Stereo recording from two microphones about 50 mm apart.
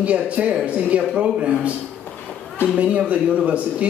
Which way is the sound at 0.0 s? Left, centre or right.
Right.